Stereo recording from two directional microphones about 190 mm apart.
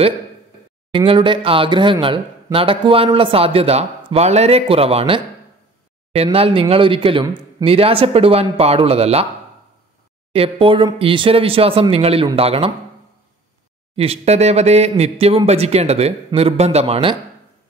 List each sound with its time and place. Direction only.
0.9 s speech: 25° right (ahead or behind)
10.3 s speech: 30° right (ahead or behind)
13.9 s speech: 30° right (ahead or behind)